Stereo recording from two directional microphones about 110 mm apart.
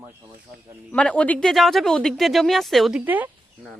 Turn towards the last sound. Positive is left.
turn(degrees=-15)  # may be behind; listen again after turning